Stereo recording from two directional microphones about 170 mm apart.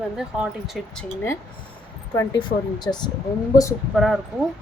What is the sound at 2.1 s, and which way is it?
Speech, 25° left (ahead or behind).